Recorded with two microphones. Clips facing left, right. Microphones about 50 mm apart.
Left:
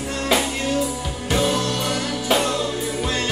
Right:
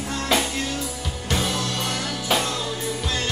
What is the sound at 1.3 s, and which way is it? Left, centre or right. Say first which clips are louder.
Music: left 5 dB; centre.